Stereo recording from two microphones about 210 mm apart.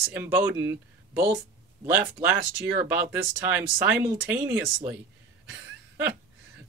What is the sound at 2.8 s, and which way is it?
Speech, 10° right (ahead or behind).